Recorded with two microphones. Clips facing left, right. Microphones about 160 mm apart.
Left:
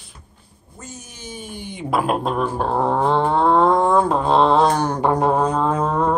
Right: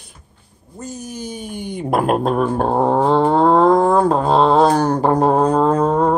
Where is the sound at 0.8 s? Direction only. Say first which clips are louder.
Right 9 dB; 40° right (ahead or behind).